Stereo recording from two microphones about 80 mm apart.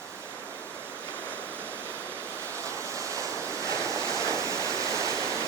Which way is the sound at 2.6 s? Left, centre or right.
Right.